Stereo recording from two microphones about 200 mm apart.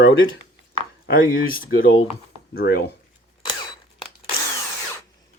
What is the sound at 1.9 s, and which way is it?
Speech, 25° left (ahead or behind).